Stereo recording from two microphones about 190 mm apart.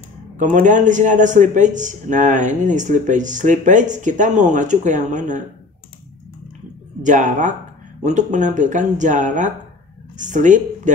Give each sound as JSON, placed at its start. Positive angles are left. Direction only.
{"t": 0.4, "sound": "a man's voice", "side_deg": -40}
{"t": 7.0, "sound": "a man's voice", "side_deg": -40}